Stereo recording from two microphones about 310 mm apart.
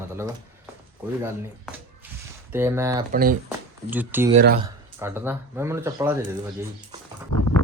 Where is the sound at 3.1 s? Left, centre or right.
Right.